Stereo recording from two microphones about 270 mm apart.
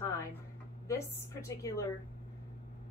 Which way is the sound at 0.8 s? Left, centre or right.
Centre.